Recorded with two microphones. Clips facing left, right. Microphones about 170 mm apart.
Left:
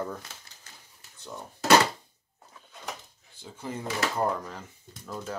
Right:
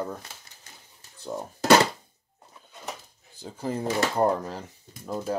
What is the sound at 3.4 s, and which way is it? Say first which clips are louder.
Speech: right 6 dB; 35° right (ahead or behind).